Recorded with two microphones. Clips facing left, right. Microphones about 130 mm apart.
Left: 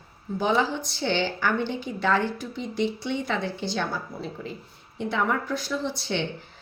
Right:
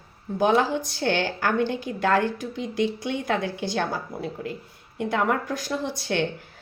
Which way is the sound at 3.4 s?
15° right (ahead or behind).